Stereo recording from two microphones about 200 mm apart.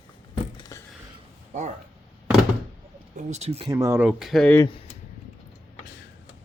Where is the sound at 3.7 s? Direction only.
15° right (ahead or behind).